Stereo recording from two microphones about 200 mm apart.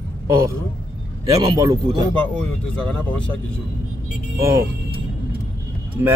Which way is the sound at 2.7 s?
5° left (ahead or behind).